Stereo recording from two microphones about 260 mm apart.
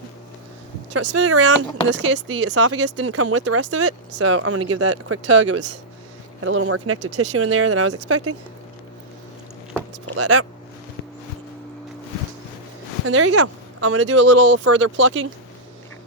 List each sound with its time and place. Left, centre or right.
1.1 s speech: right
2.1 s speech: right
2.5 s speech: right
2.7 s speech: right
3.1 s speech: right
10.1 s speech: right
13.1 s speech: right
14.6 s speech: right